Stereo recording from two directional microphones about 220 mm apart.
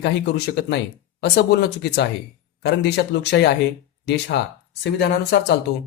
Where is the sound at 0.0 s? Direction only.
50° left (ahead or behind).